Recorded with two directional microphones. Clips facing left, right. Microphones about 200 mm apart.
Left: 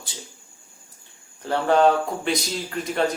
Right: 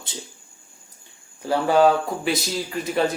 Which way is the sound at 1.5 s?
5° right (ahead or behind).